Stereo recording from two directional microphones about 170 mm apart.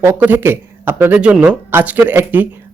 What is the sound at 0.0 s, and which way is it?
Speech, 10° right (ahead or behind).